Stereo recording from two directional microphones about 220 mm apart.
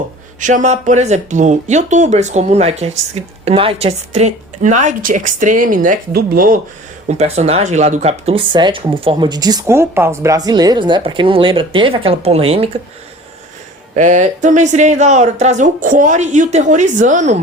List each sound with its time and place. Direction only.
0.3 s speech: 35° right (ahead or behind)
7.1 s speech: 30° right (ahead or behind)
13.9 s speech: 35° right (ahead or behind)